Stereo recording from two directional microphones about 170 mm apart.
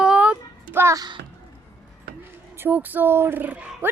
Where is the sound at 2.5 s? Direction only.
10° right (ahead or behind).